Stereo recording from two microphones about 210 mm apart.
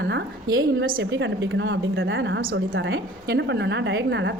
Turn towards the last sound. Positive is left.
turn(degrees=-60)  # may be behind; listen again after turning